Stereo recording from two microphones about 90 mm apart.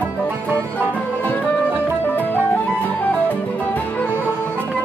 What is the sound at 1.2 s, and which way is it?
Music, 20° left (ahead or behind).